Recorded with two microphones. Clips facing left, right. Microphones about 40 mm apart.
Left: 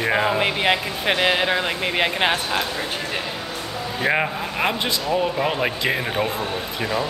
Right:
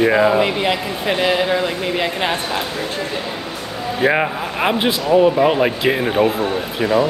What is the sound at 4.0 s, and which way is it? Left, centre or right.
Speech, centre.